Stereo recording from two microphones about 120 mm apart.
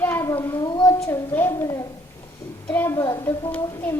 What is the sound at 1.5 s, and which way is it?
A child's voice, 30° left (ahead or behind).